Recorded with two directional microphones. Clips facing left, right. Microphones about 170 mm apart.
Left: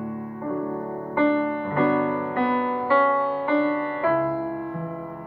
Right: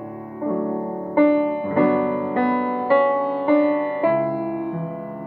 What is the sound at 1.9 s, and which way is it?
Music, 20° right (ahead or behind).